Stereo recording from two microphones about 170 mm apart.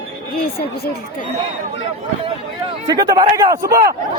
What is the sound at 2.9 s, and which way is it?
Speech, 25° right (ahead or behind).